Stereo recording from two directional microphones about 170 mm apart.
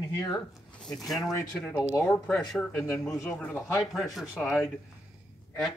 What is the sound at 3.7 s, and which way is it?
Speech, centre (ahead or behind).